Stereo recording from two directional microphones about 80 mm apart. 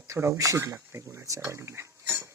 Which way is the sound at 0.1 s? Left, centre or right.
Right.